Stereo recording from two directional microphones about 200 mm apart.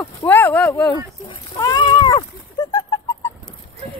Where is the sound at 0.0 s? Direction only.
10° left (ahead or behind).